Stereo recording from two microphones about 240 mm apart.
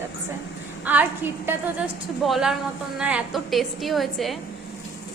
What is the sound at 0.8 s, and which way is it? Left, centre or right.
A woman's voice, centre.